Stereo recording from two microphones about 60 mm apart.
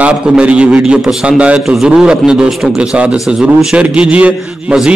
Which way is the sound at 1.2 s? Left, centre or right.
Centre.